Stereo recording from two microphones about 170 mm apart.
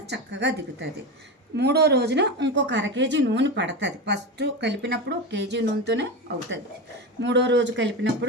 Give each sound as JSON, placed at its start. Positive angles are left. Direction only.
{"t": 0.1, "sound": "speech", "side_deg": -90}
{"t": 1.5, "sound": "a woman's voice", "side_deg": -75}
{"t": 7.2, "sound": "a woman's voice", "side_deg": -90}